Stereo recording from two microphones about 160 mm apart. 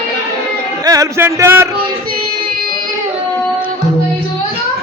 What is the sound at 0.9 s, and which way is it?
Speech, 20° right (ahead or behind).